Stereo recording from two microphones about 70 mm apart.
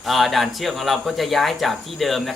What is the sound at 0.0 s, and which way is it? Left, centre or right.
Speech, centre.